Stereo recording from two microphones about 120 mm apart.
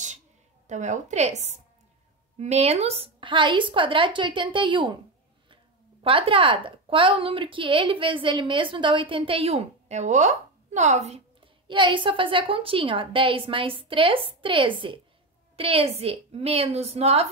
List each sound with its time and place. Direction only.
0.7 s a woman's voice: 85° right; by 4.9 s 40° right (ahead or behind)
6.0 s a woman's voice: 50° right (ahead or behind); by 11.2 s 65° right (ahead or behind)
11.6 s a woman's voice: 40° right (ahead or behind); by 17.3 s 60° right (ahead or behind)